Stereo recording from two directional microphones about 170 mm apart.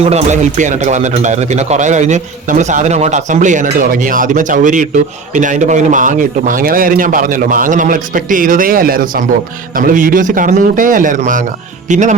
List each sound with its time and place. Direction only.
0.0 s speech: 40° right (ahead or behind)